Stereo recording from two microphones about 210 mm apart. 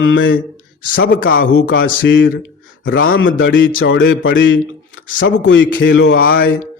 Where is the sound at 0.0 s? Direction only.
65° left (ahead or behind).